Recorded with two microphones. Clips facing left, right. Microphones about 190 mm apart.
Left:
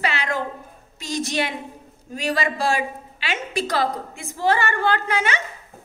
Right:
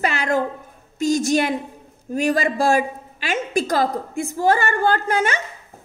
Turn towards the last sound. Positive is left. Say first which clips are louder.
# right 3 dB
turn(degrees=-45)  # may be behind; listen again after turning